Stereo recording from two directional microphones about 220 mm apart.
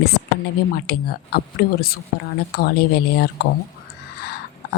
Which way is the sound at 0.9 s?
45° left (ahead or behind).